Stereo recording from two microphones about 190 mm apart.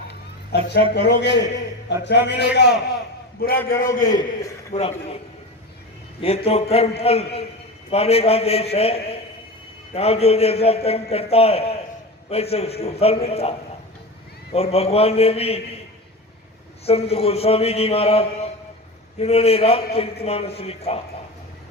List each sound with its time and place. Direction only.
0.1 s a man's voice: 60° left (ahead or behind)
3.7 s a man's voice: 50° left (ahead or behind)
4.7 s a man's voice: 30° left (ahead or behind)
6.2 s a man's voice: 30° left (ahead or behind)
16.8 s a man's voice: 30° left (ahead or behind)